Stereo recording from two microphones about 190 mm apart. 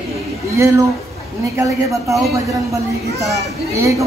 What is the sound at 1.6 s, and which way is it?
Speech, 15° right (ahead or behind).